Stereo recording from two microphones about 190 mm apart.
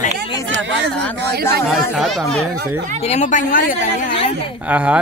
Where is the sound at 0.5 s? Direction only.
70° right (ahead or behind).